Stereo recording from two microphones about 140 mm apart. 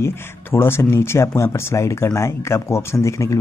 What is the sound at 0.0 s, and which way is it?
Speech, 15° left (ahead or behind).